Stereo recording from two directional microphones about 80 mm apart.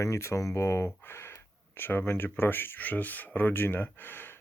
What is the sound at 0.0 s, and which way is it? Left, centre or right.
Speech, left.